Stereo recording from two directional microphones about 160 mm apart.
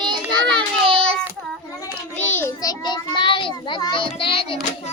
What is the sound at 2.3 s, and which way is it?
A child's voice, 20° left (ahead or behind).